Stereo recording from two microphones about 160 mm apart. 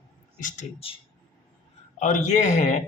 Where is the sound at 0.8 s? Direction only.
35° left (ahead or behind).